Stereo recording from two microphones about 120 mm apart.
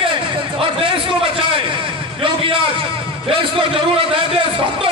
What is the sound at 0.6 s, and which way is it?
Speech, 50° right (ahead or behind).